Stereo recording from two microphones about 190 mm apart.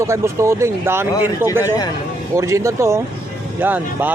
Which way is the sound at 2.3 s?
15° right (ahead or behind).